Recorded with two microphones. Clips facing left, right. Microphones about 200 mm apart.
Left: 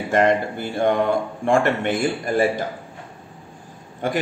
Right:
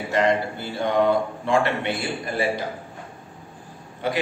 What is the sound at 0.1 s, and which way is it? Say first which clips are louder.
A man's voice: left 3 dB; 50° left (ahead or behind).